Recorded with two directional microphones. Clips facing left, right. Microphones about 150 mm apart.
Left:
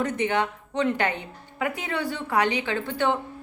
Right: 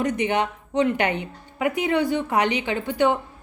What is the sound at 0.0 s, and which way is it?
A woman's voice, 15° right (ahead or behind).